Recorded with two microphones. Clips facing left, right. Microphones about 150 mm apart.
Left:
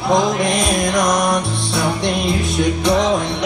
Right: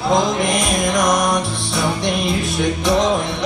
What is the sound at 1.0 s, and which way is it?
Music, 20° right (ahead or behind).